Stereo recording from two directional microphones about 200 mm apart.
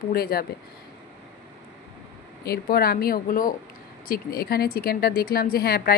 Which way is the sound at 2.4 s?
50° left (ahead or behind).